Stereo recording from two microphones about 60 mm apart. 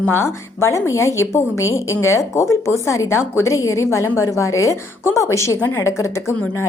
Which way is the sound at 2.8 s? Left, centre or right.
Left.